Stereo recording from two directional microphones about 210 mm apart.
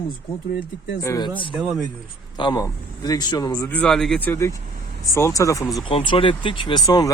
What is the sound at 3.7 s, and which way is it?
Speech, 5° left (ahead or behind).